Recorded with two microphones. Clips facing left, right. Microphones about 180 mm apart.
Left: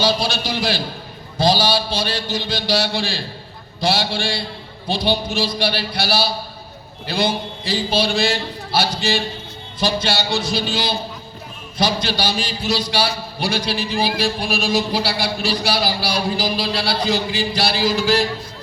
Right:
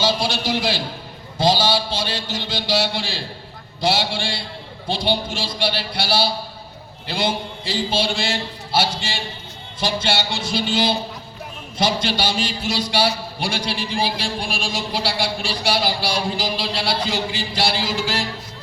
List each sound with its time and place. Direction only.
0.0 s a man's voice: 20° right (ahead or behind)
5.5 s a man's voice: 20° right (ahead or behind)